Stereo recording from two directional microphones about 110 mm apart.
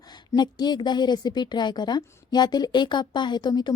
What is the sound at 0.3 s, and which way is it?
Speech, 40° left (ahead or behind).